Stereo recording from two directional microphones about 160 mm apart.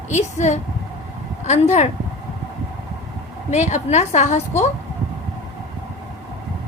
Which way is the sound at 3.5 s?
50° left (ahead or behind).